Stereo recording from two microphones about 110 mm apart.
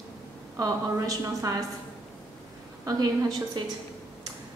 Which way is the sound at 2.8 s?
35° right (ahead or behind).